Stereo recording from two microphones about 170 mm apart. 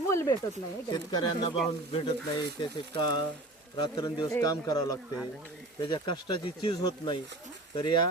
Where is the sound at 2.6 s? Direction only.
25° left (ahead or behind).